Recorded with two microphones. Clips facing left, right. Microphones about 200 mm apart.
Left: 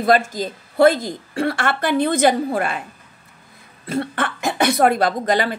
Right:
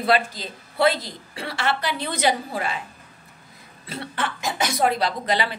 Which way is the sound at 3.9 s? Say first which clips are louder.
Left 7 dB; 50° left (ahead or behind).